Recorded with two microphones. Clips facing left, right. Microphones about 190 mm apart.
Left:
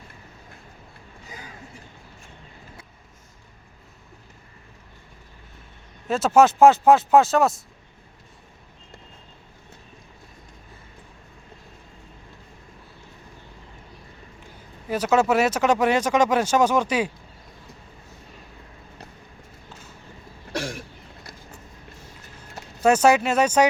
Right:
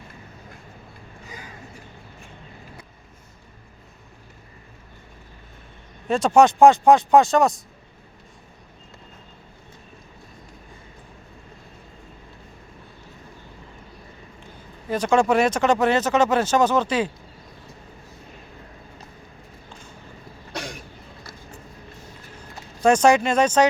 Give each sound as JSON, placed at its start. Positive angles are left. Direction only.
{"t": 6.1, "sound": "speech", "side_deg": 5}
{"t": 14.8, "sound": "speech", "side_deg": 5}
{"t": 22.8, "sound": "speech", "side_deg": 5}